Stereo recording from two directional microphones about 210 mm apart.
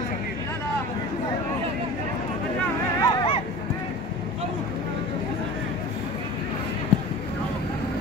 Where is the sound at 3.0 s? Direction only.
25° left (ahead or behind).